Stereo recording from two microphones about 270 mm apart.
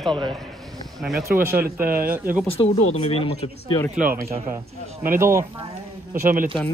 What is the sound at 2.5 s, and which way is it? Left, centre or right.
Speech, left.